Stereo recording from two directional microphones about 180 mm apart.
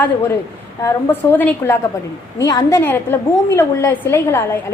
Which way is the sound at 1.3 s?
10° left (ahead or behind).